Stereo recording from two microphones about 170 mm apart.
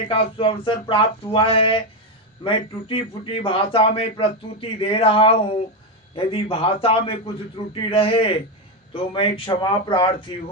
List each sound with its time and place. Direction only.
0.1 s a man's voice: 30° left (ahead or behind)